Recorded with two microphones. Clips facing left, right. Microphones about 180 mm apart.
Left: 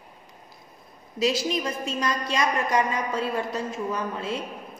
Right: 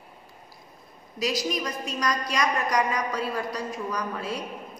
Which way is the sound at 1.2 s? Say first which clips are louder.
Left 3 dB; 25° left (ahead or behind).